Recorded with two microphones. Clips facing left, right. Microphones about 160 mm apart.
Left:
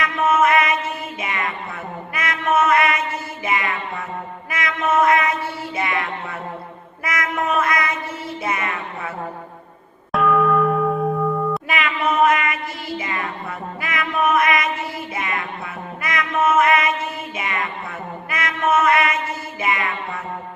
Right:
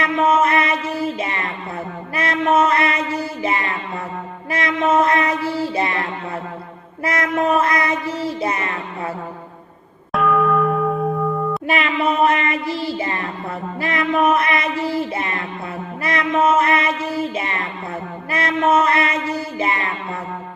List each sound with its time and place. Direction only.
0.0 s music: 30° right (ahead or behind)
2.1 s mantra: 30° right (ahead or behind)
5.7 s music: 30° right (ahead or behind)
7.0 s child singing: 30° right (ahead or behind)
10.1 s church bell: centre (ahead or behind)
11.7 s child singing: 35° right (ahead or behind)
13.8 s a sound: 30° right (ahead or behind)
16.0 s mantra: 30° right (ahead or behind)
17.3 s music: 30° right (ahead or behind)
18.3 s mantra: 30° right (ahead or behind)
19.5 s music: 30° right (ahead or behind)